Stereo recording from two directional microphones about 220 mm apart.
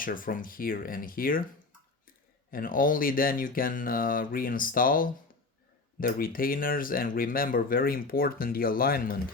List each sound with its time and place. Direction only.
0.0 s speech: 40° left (ahead or behind)
2.5 s speech: 40° left (ahead or behind)